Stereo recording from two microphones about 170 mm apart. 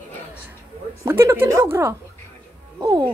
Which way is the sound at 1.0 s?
15° right (ahead or behind).